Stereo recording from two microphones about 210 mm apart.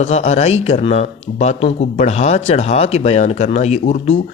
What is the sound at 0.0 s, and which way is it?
Speech, 30° left (ahead or behind).